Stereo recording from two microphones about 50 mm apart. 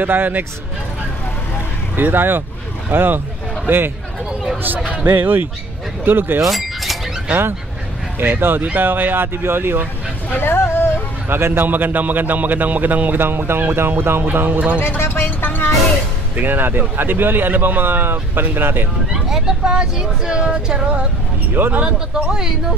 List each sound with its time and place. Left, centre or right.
0.0 s a man's voice: right
2.0 s a man's voice: right
4.7 s speech: left
5.0 s a man's voice: right
6.5 s a sound: centre
8.2 s a man's voice: right
10.4 s a sound: left
11.2 s a man's voice: right
13.2 s a man's voice: right
15.0 s music: left
16.3 s a man's voice: right
19.1 s vehicle: centre
19.7 s female singing: centre
21.7 s speech: centre